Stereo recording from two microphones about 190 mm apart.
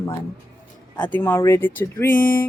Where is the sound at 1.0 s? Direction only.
10° left (ahead or behind).